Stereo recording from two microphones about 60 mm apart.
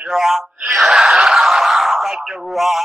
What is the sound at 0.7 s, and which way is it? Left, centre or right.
Speech, centre.